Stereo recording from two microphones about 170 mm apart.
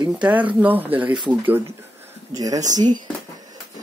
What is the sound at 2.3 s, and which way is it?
Speech, 20° right (ahead or behind).